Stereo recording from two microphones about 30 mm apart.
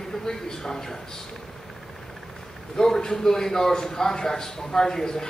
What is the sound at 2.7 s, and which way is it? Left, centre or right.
A man's voice, centre.